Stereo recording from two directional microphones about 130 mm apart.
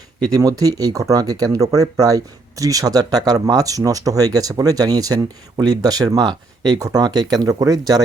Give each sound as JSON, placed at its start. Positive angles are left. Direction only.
{"t": 0.3, "sound": "speech", "side_deg": -25}